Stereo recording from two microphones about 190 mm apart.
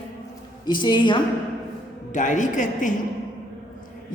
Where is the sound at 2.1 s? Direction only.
40° left (ahead or behind).